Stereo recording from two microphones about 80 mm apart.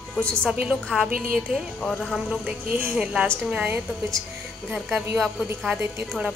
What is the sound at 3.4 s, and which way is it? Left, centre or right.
Speech, centre.